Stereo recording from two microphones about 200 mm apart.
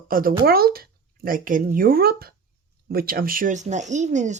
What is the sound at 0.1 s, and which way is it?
Speech, 45° right (ahead or behind).